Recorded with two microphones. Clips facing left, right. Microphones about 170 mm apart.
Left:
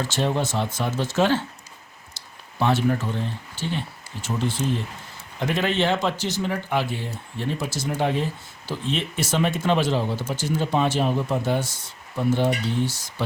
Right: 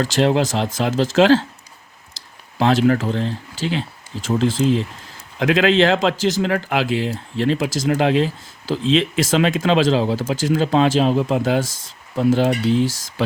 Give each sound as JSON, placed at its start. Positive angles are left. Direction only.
{"t": 0.0, "sound": "speech", "side_deg": -90}